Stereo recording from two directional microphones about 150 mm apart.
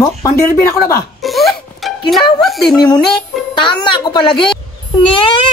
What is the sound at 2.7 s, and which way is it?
Music, 30° left (ahead or behind).